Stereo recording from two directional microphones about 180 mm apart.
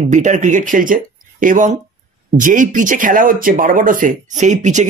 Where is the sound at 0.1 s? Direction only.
45° right (ahead or behind).